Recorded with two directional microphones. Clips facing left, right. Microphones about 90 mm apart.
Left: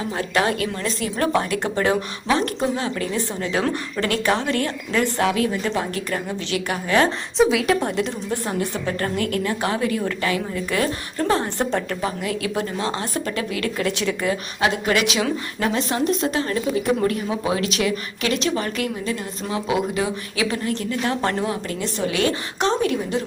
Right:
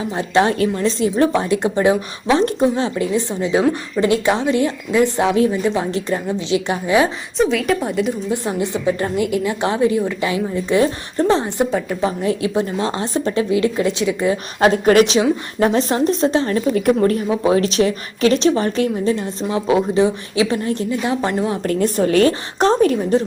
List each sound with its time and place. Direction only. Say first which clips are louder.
0.2 s a woman's voice: right 6 dB; 25° right (ahead or behind)
7.3 s a woman's voice: right 1 dB; centre (ahead or behind)
8.3 s a woman's voice: right 4 dB; 15° right (ahead or behind)
11.6 s a woman's voice: right 4 dB; 10° right (ahead or behind)
12.0 s a woman's voice: right 6 dB; 25° right (ahead or behind)
14.6 s a woman's voice: right 9 dB; 40° right (ahead or behind)
16.7 s a woman's voice: right 5 dB; 45° right (ahead or behind); by 21.4 s 15° right (ahead or behind)
21.7 s a woman's voice: right 9 dB; 45° right (ahead or behind)